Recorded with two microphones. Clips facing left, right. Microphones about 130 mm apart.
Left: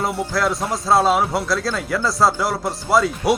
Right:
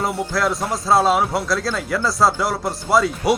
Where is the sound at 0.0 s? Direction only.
Centre (ahead or behind).